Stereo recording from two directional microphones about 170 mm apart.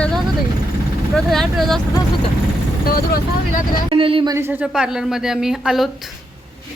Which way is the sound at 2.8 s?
60° left (ahead or behind).